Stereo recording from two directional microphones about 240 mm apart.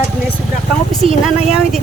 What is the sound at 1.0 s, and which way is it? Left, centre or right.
Speech, right.